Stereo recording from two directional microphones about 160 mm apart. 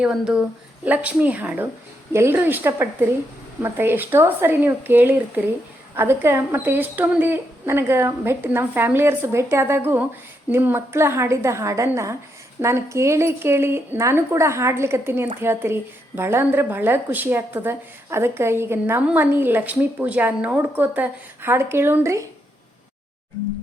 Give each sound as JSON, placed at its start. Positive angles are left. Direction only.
{"t": 0.0, "sound": "a woman's voice", "side_deg": -5}